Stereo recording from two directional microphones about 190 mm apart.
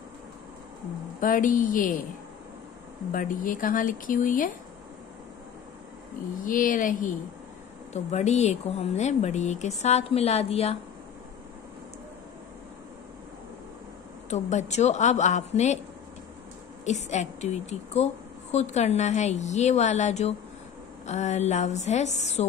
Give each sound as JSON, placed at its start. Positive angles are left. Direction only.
{"t": 1.2, "sound": "speech", "side_deg": 45}
{"t": 3.1, "sound": "speech", "side_deg": 45}
{"t": 6.4, "sound": "a woman's voice", "side_deg": 45}
{"t": 14.3, "sound": "a woman's voice", "side_deg": 40}
{"t": 16.8, "sound": "a woman's voice", "side_deg": 40}